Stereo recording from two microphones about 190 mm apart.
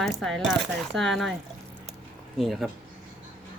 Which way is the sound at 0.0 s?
Centre (ahead or behind).